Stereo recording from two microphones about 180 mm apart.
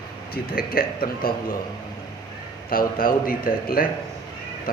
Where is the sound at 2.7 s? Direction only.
50° left (ahead or behind).